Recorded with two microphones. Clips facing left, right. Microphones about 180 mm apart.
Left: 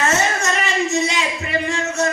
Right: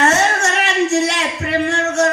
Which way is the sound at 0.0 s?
70° right (ahead or behind).